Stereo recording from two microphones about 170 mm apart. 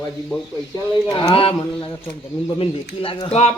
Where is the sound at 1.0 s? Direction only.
25° left (ahead or behind).